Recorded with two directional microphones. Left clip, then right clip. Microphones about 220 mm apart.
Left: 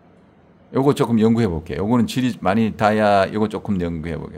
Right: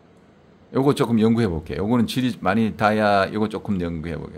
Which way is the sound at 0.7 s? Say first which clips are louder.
Left 2 dB; 10° left (ahead or behind).